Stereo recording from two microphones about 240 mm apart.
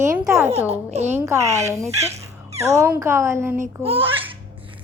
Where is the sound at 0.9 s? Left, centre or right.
Right.